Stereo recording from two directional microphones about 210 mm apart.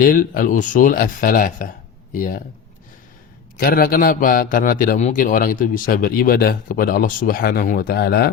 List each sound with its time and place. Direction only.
0.0 s speech: 40° left (ahead or behind)
3.6 s a man's voice: 45° left (ahead or behind)